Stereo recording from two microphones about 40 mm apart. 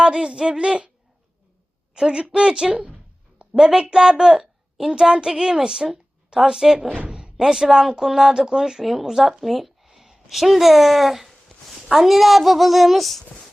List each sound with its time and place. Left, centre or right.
0.0 s speech: centre
2.0 s speech: right
2.7 s a sound: right
3.5 s a woman's voice: centre
7.1 s a sound: right
7.3 s a woman's voice: centre